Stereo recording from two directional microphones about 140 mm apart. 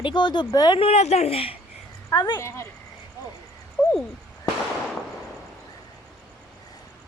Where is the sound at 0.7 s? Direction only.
50° left (ahead or behind).